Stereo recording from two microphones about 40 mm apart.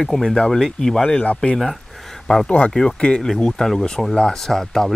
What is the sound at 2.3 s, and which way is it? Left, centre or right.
Speech, left.